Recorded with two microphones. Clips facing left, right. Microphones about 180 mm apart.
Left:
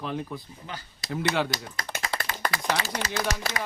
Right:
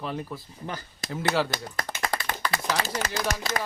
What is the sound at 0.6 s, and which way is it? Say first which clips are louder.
Speech: right 4 dB; 45° right (ahead or behind).